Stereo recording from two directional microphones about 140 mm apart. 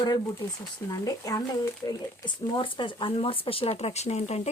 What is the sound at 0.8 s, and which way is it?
Speech, 25° left (ahead or behind).